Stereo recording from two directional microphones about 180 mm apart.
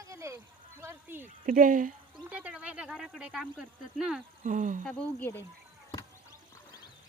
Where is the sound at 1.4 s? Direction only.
50° right (ahead or behind).